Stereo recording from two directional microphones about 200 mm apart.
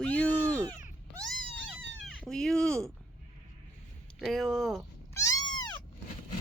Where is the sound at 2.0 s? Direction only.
5° left (ahead or behind).